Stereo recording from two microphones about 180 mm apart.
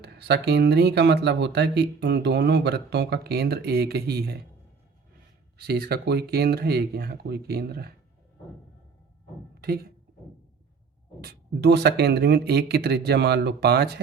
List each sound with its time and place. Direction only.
0.0 s speech: 65° right (ahead or behind)
5.5 s speech: 60° right (ahead or behind)
9.6 s speech: 60° right (ahead or behind)
11.2 s speech: 60° right (ahead or behind)